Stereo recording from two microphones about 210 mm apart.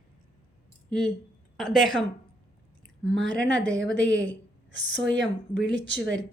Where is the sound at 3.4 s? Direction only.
65° right (ahead or behind).